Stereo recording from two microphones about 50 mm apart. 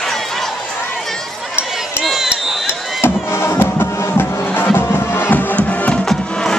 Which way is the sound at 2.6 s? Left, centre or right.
Left.